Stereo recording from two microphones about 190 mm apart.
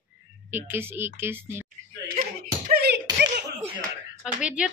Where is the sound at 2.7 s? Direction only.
60° right (ahead or behind).